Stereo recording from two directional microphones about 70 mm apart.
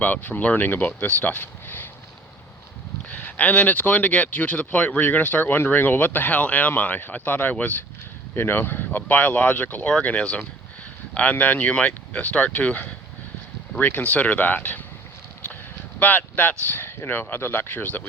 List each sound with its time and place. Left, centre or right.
0.0 s speech: left
3.1 s speech: left
8.4 s speech: left
10.2 s speech: centre
16.0 s speech: left